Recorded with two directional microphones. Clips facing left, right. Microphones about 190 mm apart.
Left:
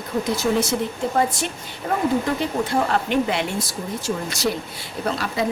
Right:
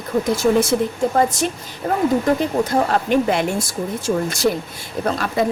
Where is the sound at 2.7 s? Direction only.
45° right (ahead or behind).